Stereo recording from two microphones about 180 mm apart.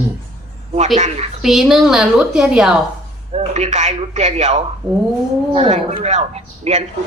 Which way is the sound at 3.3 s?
40° right (ahead or behind).